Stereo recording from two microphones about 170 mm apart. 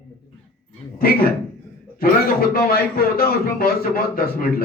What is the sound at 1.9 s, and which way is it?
Speech, 60° left (ahead or behind).